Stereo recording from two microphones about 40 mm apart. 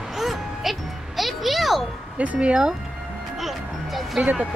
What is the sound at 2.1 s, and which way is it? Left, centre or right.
Speech, right.